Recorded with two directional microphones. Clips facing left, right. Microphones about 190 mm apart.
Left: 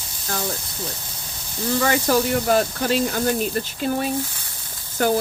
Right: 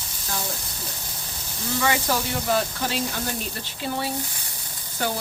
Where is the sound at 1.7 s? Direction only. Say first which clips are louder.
Left 5 dB; 50° left (ahead or behind).